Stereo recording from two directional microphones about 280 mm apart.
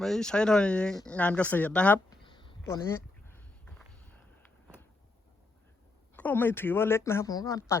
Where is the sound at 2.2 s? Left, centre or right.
Centre.